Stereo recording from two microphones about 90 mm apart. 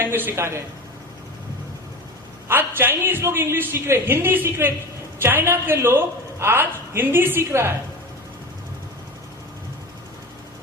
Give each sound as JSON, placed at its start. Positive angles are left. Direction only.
{"t": 0.0, "sound": "a man's voice", "side_deg": -25}
{"t": 2.5, "sound": "a man's voice", "side_deg": -25}